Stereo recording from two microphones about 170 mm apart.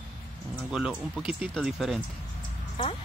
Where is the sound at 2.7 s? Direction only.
35° left (ahead or behind).